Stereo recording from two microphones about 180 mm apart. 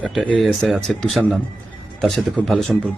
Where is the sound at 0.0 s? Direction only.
5° left (ahead or behind).